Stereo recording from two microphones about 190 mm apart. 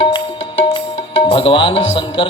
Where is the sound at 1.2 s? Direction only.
30° left (ahead or behind).